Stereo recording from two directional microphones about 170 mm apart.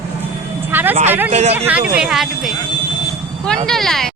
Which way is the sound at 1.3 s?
40° right (ahead or behind).